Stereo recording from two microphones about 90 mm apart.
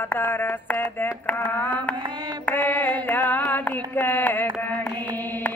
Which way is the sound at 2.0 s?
55° right (ahead or behind).